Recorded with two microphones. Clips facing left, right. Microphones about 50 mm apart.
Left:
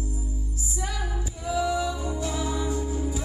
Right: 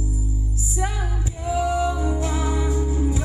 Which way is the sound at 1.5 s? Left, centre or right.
Right.